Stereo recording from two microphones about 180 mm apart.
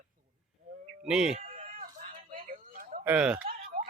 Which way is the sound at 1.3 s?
45° right (ahead or behind).